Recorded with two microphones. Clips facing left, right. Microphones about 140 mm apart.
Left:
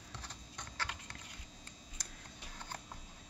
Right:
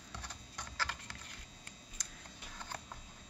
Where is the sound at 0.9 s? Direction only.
10° left (ahead or behind).